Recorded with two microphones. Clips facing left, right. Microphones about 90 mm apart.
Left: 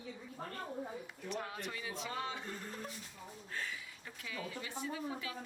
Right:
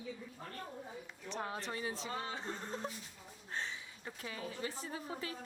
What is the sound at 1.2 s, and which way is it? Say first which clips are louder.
Speech: right 1 dB; 30° right (ahead or behind).